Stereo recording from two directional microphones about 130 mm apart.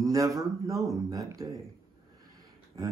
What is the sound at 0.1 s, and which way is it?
Speech, 25° right (ahead or behind).